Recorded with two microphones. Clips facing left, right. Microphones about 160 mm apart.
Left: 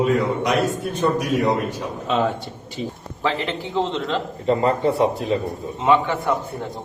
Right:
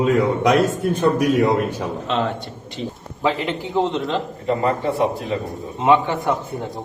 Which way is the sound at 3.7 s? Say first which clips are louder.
Right 2 dB; 15° right (ahead or behind).